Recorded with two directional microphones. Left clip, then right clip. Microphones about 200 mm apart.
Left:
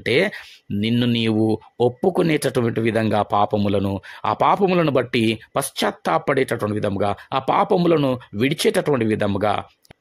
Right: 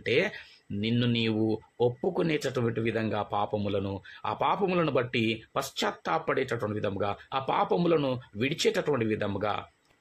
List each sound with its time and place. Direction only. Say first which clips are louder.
0.0 s speech: left 8 dB; 50° left (ahead or behind)